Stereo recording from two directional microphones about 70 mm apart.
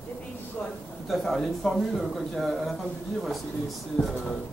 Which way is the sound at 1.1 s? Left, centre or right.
Centre.